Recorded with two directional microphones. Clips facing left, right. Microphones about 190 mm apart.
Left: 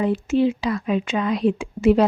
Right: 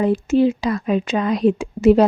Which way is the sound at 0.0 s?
40° right (ahead or behind).